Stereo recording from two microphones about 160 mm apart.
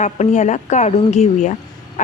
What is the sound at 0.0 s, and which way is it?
A woman's voice, 45° left (ahead or behind).